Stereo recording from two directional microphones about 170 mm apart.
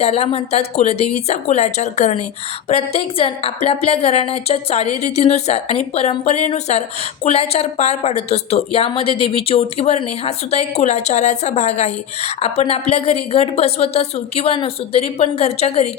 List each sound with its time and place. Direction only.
0.0 s a woman's voice: 35° left (ahead or behind)